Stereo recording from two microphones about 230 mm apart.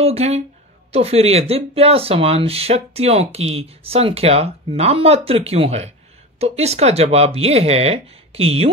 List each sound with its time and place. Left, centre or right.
0.0 s speech: right